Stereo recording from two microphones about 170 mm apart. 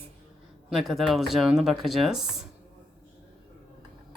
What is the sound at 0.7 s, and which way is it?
Speech, centre (ahead or behind).